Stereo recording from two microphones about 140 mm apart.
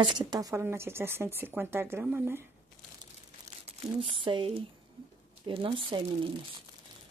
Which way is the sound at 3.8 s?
35° right (ahead or behind).